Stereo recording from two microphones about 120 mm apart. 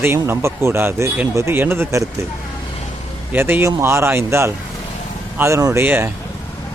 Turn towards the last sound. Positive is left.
turn(degrees=-20)  # may be behind; listen again after turning